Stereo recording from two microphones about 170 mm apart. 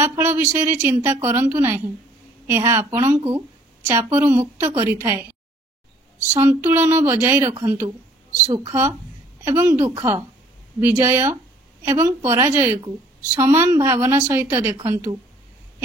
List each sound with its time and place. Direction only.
0.0 s a woman's voice: 15° right (ahead or behind)
6.4 s a woman's voice: 15° right (ahead or behind)